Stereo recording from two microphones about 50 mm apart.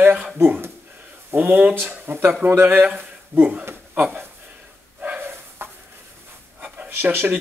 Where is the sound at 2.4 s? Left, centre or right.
Right.